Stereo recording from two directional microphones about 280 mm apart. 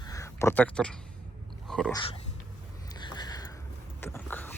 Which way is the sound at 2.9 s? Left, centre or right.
Centre.